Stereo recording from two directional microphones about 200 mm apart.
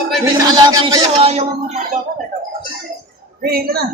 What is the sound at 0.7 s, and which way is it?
Speech, 20° right (ahead or behind).